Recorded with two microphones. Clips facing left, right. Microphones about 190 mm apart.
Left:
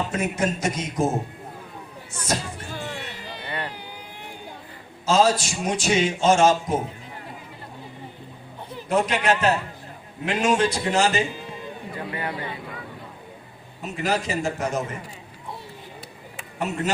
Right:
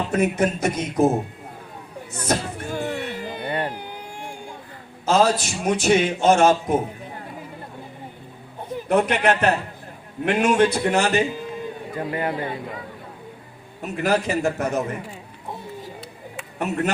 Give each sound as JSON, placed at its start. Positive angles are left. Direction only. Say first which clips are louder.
{"t": 0.1, "sound": "a man's voice", "louder": "right 4 dB", "side_deg": -60}
{"t": 2.1, "sound": "a sound", "louder": "right 4 dB", "side_deg": -55}
{"t": 5.0, "sound": "a man's voice", "louder": "right 1 dB", "side_deg": -60}
{"t": 8.7, "sound": "a man's voice", "louder": "right 3 dB", "side_deg": -60}
{"t": 11.9, "sound": "a man's voice", "louder": "right 6 dB", "side_deg": -45}
{"t": 13.8, "sound": "a man's voice", "louder": "right 4 dB", "side_deg": -55}
{"t": 16.6, "sound": "a man's voice", "louder": "right 3 dB", "side_deg": -60}